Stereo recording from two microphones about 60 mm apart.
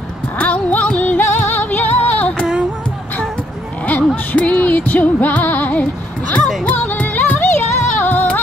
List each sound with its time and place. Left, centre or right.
0.4 s music: left
3.8 s music: left